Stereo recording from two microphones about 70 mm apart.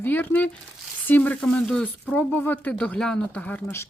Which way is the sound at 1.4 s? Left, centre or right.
Centre.